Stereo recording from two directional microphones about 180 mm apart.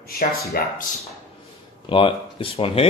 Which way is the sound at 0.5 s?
55° left (ahead or behind).